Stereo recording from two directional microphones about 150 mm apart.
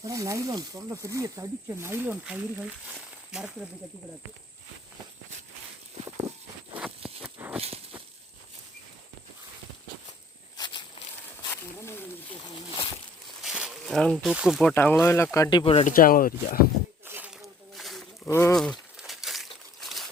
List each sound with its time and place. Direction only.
0.0 s speech: 20° right (ahead or behind); by 3.7 s 5° right (ahead or behind)
6.3 s walk: 50° right (ahead or behind)
7.5 s a sound: 40° right (ahead or behind)
11.5 s wild animals: 15° left (ahead or behind)
13.4 s snake: 5° right (ahead or behind)
14.7 s speech: 15° left (ahead or behind)
15.6 s speech: 40° left (ahead or behind)
15.9 s speech: 70° left (ahead or behind)
17.1 s a sound: 15° right (ahead or behind)
17.7 s wild animals: centre (ahead or behind)
18.3 s speech: 20° left (ahead or behind)
18.5 s a sound: 5° left (ahead or behind)
19.8 s trickle: centre (ahead or behind)